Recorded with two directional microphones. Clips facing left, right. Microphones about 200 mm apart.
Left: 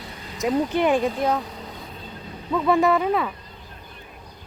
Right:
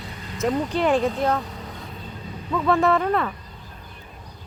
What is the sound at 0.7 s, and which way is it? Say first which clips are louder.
Speech: left 1 dB; 20° left (ahead or behind).